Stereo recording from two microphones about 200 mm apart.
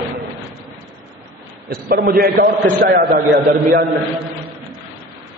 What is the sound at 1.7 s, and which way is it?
A man's voice, 50° right (ahead or behind).